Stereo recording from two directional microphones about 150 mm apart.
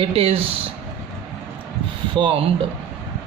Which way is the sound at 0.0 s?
40° right (ahead or behind).